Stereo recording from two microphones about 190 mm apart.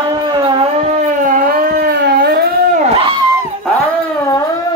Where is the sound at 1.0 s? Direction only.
45° right (ahead or behind).